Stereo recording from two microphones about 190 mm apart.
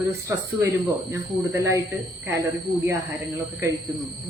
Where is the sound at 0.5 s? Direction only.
15° right (ahead or behind).